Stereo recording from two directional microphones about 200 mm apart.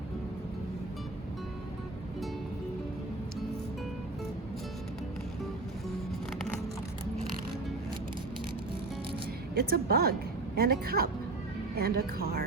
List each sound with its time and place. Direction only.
9.6 s a woman's voice: 50° right (ahead or behind)